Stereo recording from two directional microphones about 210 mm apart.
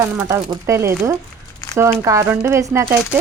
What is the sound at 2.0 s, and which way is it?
Speech, 15° right (ahead or behind).